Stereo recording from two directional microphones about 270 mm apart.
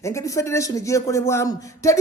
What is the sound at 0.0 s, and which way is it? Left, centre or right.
A man's voice, centre.